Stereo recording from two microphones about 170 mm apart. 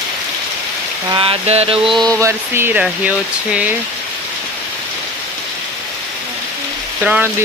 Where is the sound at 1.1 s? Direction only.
30° right (ahead or behind).